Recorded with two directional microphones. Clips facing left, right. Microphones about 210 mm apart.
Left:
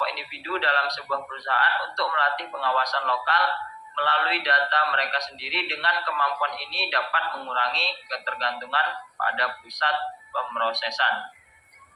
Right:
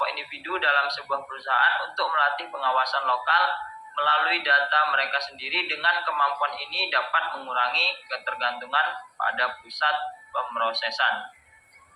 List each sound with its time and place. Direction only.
0.0 s a man's voice: 55° left (ahead or behind)